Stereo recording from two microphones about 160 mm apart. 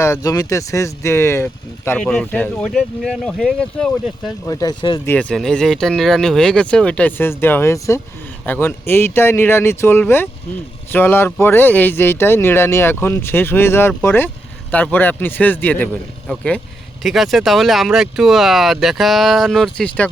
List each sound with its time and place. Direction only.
0.0 s speech: 20° left (ahead or behind); by 4.3 s centre (ahead or behind)
4.4 s speech: 20° left (ahead or behind)
5.0 s speech: 5° left (ahead or behind)